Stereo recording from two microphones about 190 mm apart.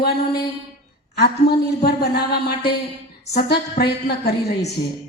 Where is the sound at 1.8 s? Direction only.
55° left (ahead or behind).